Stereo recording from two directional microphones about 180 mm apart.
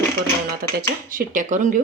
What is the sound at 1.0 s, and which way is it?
Speech, 50° right (ahead or behind).